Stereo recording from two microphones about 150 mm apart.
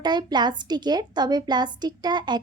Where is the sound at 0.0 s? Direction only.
30° right (ahead or behind).